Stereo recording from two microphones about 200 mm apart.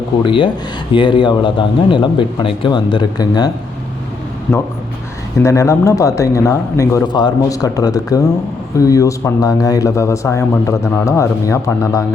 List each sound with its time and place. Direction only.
0.3 s speech: 25° left (ahead or behind)
5.4 s speech: 15° left (ahead or behind)